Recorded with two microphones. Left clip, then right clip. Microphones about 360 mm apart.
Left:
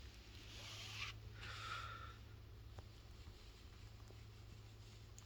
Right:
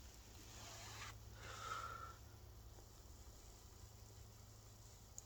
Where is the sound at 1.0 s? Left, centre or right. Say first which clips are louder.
Left 5 dB; centre.